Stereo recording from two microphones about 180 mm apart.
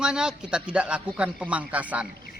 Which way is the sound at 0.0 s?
5° right (ahead or behind).